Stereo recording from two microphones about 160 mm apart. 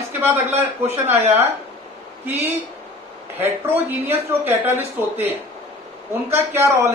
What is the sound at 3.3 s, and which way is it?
Speech, 15° right (ahead or behind).